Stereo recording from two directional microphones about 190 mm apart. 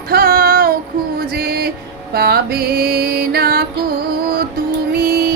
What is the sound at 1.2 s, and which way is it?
Music, 50° right (ahead or behind).